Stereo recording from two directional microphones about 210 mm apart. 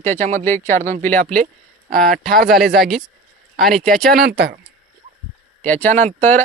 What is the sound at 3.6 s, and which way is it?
Speech, centre (ahead or behind).